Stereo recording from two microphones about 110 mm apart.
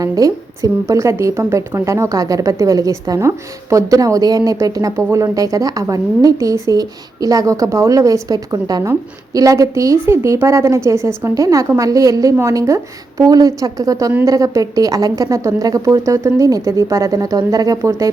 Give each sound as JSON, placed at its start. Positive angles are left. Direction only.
{"t": 0.0, "sound": "a woman's voice", "side_deg": -30}